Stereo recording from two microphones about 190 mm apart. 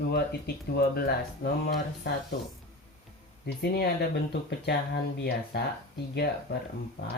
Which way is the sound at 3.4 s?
60° left (ahead or behind).